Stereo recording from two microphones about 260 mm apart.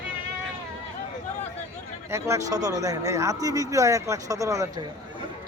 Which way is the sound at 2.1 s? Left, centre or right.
Centre.